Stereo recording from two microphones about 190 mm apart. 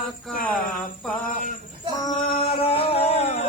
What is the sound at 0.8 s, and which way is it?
Mantra, 5° left (ahead or behind).